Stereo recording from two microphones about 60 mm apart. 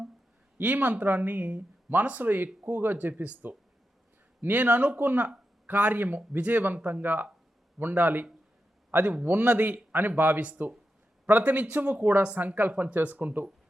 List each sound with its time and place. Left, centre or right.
0.6 s a man's voice: right